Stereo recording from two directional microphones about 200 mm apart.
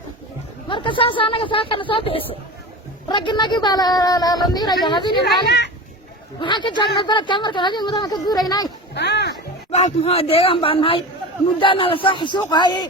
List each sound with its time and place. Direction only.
0.7 s speech: 25° left (ahead or behind)
5.2 s speech: 55° left (ahead or behind)
6.4 s speech: 25° left (ahead or behind)
9.0 s a sound: 60° left (ahead or behind)
9.7 s speech: 30° left (ahead or behind)